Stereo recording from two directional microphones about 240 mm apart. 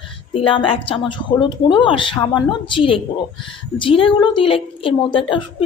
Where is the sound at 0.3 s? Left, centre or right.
Left.